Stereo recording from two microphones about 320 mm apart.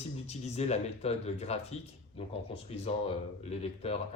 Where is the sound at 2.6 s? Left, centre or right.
Centre.